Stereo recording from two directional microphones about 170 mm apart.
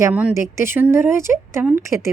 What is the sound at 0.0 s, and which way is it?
A woman's voice, 10° right (ahead or behind).